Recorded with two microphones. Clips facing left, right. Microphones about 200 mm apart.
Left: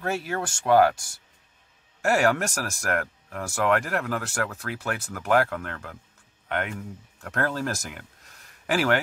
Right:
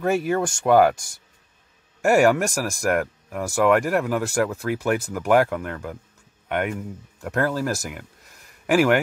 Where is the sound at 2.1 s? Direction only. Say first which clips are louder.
Right 5 dB; 10° right (ahead or behind).